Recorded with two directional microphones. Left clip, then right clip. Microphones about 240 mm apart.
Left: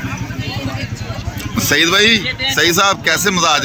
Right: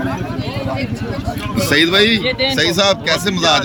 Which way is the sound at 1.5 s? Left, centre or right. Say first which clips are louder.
Even; centre.